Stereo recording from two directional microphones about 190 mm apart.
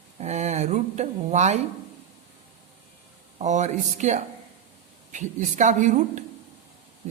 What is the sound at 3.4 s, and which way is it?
A woman's voice, 40° right (ahead or behind).